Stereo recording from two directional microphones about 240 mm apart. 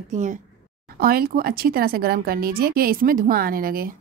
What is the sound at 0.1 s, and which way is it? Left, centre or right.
Speech, right.